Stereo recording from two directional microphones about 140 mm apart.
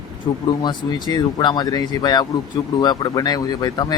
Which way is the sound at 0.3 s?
35° left (ahead or behind).